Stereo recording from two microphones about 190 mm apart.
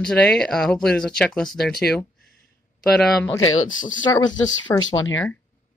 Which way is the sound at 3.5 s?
90° left.